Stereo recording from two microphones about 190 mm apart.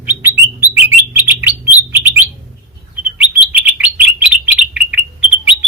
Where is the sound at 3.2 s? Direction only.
10° right (ahead or behind).